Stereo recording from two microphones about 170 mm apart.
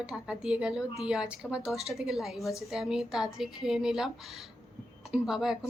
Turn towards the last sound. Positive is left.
turn(degrees=0)  # may be behind; listen again after turning